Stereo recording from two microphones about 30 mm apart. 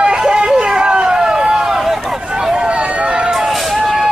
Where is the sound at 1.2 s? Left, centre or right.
Right.